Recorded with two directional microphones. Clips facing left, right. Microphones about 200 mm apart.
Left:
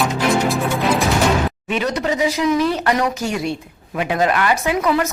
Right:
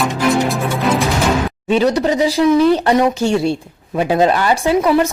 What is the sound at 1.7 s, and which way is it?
Speech, 35° right (ahead or behind).